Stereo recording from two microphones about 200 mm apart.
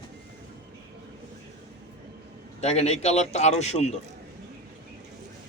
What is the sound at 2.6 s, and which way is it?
Speech, 30° left (ahead or behind).